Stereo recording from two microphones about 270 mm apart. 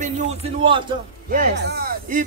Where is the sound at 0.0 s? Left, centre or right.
Right.